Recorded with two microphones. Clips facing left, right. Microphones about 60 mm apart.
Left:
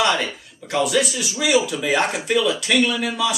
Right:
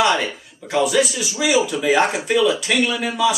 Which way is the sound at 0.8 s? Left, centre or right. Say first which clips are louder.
Right 2 dB; centre.